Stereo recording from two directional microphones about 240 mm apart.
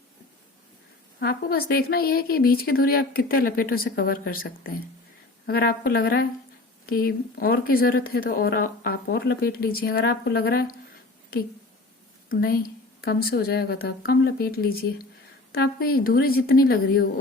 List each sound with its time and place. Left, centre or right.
1.2 s speech: left
12.3 s speech: left